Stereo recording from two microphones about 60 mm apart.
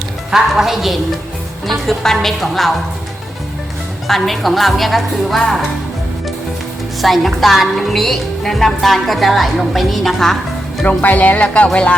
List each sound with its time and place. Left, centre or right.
0.3 s a woman's voice: centre
4.0 s a woman's voice: centre
7.0 s a woman's voice: centre
10.8 s speech: left